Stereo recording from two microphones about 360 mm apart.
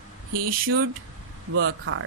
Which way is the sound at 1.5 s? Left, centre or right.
Right.